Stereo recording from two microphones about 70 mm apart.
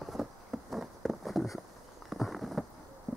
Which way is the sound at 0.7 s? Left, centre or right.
Centre.